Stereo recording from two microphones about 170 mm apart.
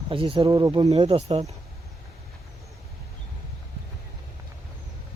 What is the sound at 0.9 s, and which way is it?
Speech, 40° right (ahead or behind).